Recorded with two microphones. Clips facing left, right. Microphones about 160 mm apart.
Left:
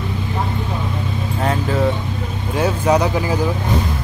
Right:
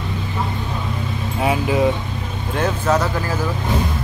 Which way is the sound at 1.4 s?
10° right (ahead or behind).